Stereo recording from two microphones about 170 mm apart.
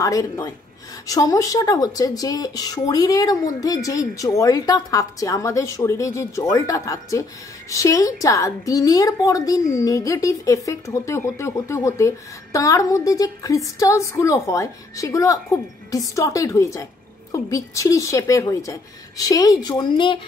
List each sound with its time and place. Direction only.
0.0 s speech: 20° left (ahead or behind)